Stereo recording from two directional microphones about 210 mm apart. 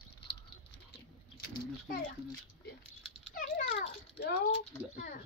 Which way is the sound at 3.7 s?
50° left (ahead or behind).